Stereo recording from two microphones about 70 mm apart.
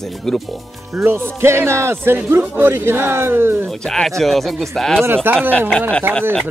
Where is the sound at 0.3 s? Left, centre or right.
Centre.